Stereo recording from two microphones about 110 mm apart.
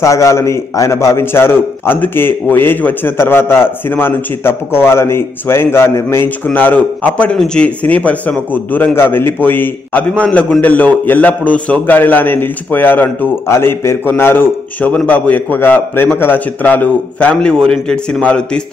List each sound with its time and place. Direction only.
0.0 s a man's voice: 25° left (ahead or behind); by 18.6 s 10° left (ahead or behind)